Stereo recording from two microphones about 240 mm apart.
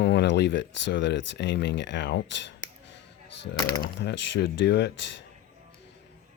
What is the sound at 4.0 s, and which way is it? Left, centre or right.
Speech, left.